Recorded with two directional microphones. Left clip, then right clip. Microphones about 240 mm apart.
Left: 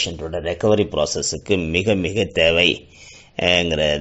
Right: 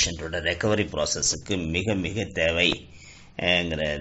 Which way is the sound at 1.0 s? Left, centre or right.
Left.